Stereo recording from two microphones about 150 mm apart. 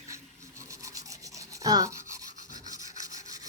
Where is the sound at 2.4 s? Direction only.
55° left (ahead or behind).